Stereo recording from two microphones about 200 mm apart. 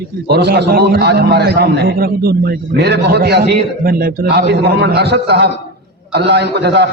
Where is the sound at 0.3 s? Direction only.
55° right (ahead or behind).